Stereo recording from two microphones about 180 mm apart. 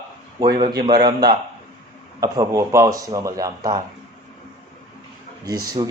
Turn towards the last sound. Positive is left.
turn(degrees=-20)  # may be behind; listen again after turning